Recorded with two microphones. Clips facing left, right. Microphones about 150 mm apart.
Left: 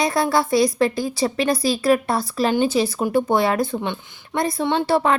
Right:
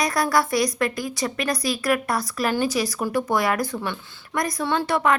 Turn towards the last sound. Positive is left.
turn(degrees=30)  # may be behind; listen again after turning